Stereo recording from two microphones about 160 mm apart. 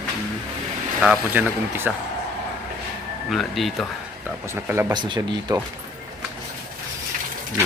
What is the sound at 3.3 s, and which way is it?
Speech, centre (ahead or behind).